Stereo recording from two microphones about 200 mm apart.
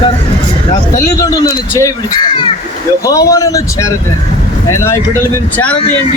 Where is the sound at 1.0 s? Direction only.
15° left (ahead or behind).